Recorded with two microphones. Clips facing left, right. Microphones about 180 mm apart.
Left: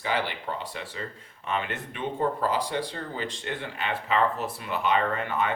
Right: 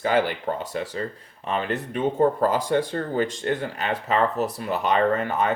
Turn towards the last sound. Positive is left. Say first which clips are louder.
# right 5 dB
turn(degrees=-40)  # may be behind; listen again after turning